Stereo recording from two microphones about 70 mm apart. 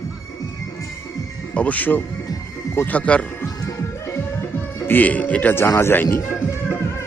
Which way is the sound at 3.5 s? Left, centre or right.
Left.